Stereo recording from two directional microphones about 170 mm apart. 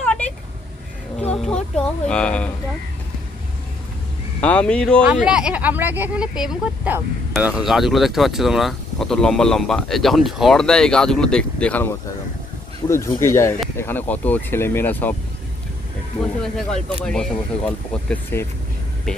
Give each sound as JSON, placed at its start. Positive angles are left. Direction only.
{"t": 0.0, "sound": "vehicle", "side_deg": 10}
{"t": 1.3, "sound": "speech", "side_deg": 5}
{"t": 4.4, "sound": "speech", "side_deg": 5}
{"t": 5.0, "sound": "speech", "side_deg": -5}
{"t": 16.2, "sound": "speech", "side_deg": 5}